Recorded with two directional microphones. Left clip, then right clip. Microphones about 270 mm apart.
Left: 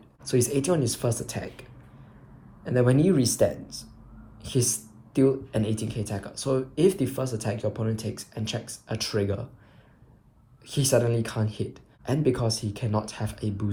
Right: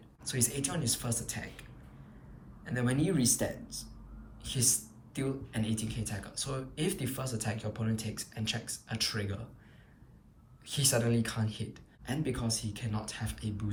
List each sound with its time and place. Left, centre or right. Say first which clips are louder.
0.3 s speech: left 12 dB; centre
2.6 s speech: left 10 dB; centre
10.7 s speech: left 7 dB; centre